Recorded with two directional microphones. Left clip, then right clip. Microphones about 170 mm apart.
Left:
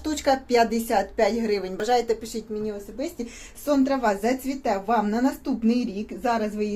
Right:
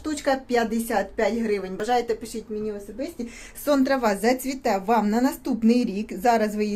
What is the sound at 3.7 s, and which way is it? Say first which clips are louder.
Speech: right 1 dB; 50° right (ahead or behind).